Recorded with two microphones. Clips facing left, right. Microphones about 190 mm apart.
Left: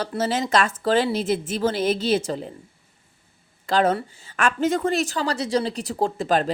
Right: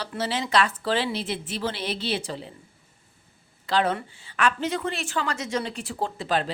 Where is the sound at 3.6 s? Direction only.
45° left (ahead or behind).